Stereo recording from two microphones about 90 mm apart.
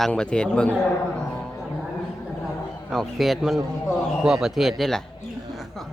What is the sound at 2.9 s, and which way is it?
A man's voice, centre (ahead or behind).